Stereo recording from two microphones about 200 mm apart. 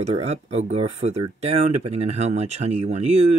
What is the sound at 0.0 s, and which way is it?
Speech, 30° right (ahead or behind).